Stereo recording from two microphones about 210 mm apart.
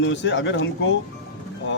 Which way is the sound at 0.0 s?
60° left (ahead or behind).